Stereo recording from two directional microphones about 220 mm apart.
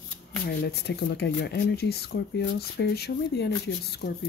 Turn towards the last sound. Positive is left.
turn(degrees=45)  # may be behind; listen again after turning